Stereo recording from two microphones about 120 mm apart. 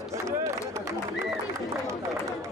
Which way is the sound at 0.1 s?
25° right (ahead or behind).